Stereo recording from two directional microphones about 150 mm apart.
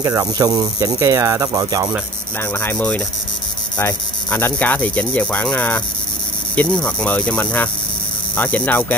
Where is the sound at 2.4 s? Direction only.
15° left (ahead or behind).